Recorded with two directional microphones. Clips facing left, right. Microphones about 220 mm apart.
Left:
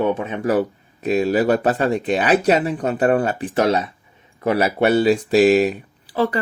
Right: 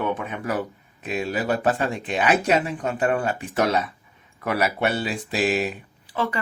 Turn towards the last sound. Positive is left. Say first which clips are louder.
# left 7 dB
turn(degrees=35)  # may be behind; listen again after turning